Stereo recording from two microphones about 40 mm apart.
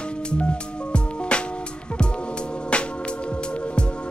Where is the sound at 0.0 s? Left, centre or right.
Left.